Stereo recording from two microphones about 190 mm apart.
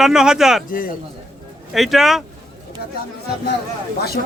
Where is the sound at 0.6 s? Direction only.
45° left (ahead or behind).